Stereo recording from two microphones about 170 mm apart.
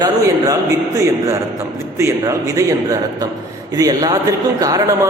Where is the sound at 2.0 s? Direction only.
15° right (ahead or behind).